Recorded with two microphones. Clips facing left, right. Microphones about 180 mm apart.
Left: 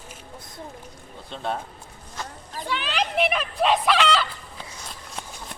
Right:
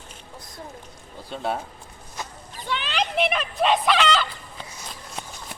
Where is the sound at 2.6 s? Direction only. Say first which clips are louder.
Even; 5° left (ahead or behind).